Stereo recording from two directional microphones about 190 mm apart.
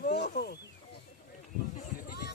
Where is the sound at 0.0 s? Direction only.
50° left (ahead or behind).